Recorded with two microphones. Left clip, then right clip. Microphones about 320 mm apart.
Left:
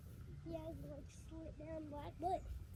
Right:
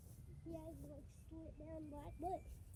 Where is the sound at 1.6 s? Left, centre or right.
Left.